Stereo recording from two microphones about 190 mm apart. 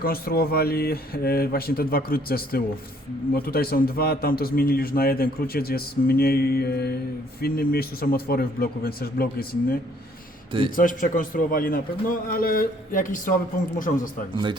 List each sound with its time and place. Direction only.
0.0 s a man's voice: 50° left (ahead or behind)
10.8 s a man's voice: 45° left (ahead or behind)
14.3 s speech: 25° right (ahead or behind)